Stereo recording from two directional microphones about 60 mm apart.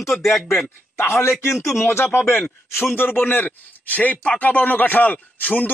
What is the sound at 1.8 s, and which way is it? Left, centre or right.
Speech, left.